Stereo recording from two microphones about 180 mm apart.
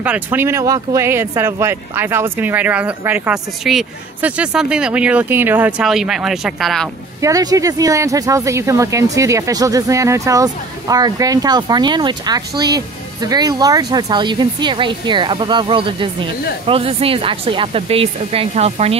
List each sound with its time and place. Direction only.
0.0 s speech: 10° right (ahead or behind)
7.2 s speech: 20° right (ahead or behind); by 18.9 s 35° right (ahead or behind)